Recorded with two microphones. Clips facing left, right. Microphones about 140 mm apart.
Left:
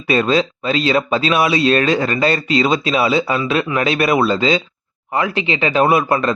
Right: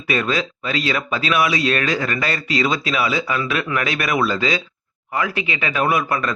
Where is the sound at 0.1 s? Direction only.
30° left (ahead or behind).